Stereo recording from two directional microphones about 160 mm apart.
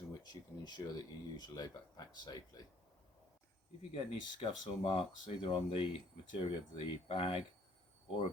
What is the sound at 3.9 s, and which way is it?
Speech, 35° left (ahead or behind).